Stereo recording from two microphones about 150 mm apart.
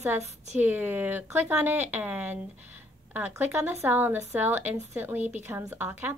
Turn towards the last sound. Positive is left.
turn(degrees=-15)  # may be behind; listen again after turning